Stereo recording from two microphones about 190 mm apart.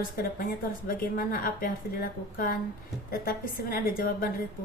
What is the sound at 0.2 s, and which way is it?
A woman's voice, 50° left (ahead or behind).